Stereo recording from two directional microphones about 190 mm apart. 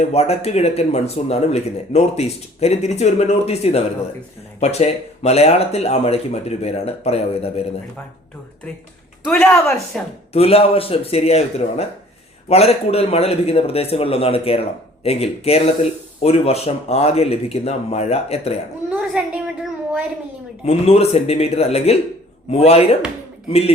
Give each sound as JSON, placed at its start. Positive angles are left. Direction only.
{"t": 0.0, "sound": "a man's voice", "side_deg": 35}
{"t": 9.2, "sound": "speech", "side_deg": 5}
{"t": 10.3, "sound": "a man's voice", "side_deg": 30}
{"t": 19.2, "sound": "a sound", "side_deg": -5}
{"t": 20.7, "sound": "a man's voice", "side_deg": 35}